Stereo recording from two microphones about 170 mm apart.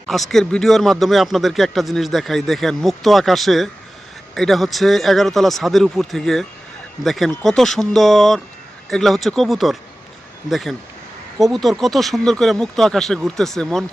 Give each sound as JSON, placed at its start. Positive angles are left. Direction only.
{"t": 0.1, "sound": "speech", "side_deg": 0}